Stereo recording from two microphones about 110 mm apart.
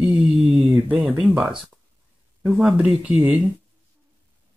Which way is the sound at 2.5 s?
10° right (ahead or behind).